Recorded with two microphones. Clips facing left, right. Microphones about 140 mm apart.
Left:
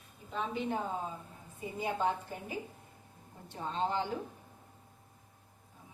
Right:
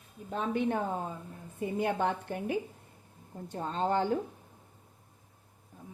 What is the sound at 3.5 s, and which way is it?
Speech, 45° right (ahead or behind).